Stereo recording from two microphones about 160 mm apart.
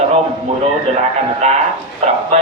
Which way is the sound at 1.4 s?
45° right (ahead or behind).